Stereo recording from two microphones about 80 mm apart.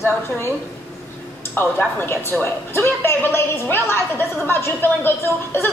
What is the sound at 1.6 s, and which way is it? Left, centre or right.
A woman's voice, left.